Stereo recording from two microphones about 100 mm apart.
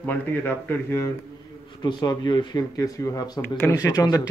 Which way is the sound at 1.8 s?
45° left (ahead or behind).